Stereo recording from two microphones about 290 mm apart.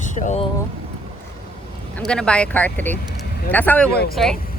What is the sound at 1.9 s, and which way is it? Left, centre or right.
Speech, centre.